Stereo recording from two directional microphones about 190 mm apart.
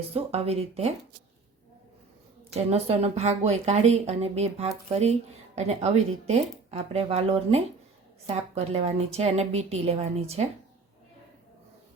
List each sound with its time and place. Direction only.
0.1 s a woman's voice: 30° right (ahead or behind)
2.5 s a woman's voice: 35° right (ahead or behind)